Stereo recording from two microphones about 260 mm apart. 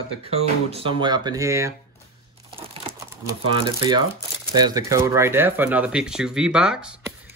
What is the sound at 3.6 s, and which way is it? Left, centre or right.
Speech, centre.